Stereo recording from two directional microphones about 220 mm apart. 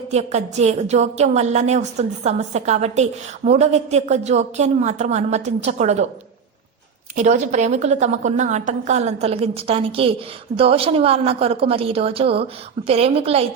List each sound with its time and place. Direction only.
0.1 s a woman's voice: 30° right (ahead or behind)
7.2 s a woman's voice: 30° right (ahead or behind)